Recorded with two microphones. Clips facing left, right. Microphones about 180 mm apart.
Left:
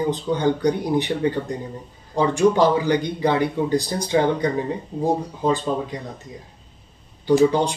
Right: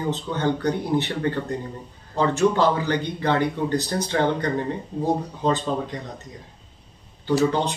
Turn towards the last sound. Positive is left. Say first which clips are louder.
# left 4 dB
turn(degrees=15)  # may be behind; listen again after turning